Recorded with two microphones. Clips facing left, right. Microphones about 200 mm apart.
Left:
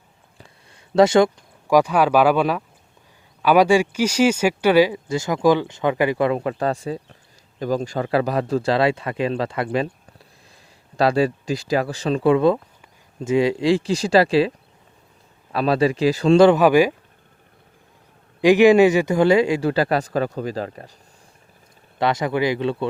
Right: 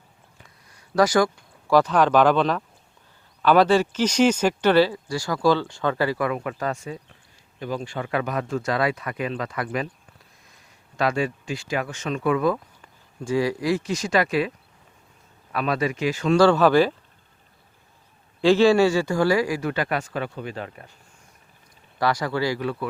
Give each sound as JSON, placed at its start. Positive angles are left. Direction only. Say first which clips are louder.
{"t": 0.3, "sound": "a man's voice", "louder": "left 7 dB", "side_deg": 30}
{"t": 10.9, "sound": "a man's voice", "louder": "left 6 dB", "side_deg": 35}
{"t": 15.5, "sound": "speech", "louder": "left 6 dB", "side_deg": 30}
{"t": 16.4, "sound": "speech", "louder": "left 2 dB", "side_deg": 15}
{"t": 18.3, "sound": "a man's voice", "louder": "left 4 dB", "side_deg": 15}
{"t": 21.9, "sound": "a man's voice", "louder": "left 3 dB", "side_deg": 20}